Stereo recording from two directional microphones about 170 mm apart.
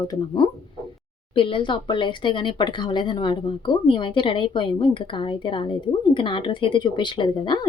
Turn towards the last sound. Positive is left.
turn(degrees=25)  # may be behind; listen again after turning